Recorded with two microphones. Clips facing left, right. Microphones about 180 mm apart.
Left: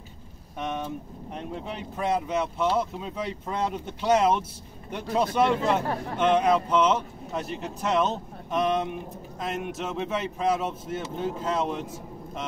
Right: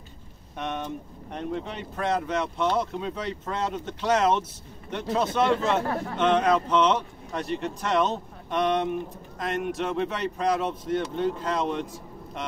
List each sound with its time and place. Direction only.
0.6 s speech: centre (ahead or behind)